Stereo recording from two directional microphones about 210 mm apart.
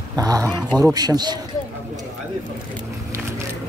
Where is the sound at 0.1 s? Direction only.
15° right (ahead or behind).